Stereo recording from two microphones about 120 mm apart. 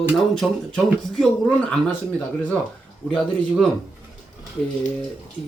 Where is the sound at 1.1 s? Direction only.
5° left (ahead or behind).